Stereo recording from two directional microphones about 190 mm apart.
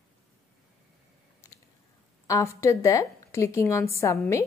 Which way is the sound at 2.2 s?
15° left (ahead or behind).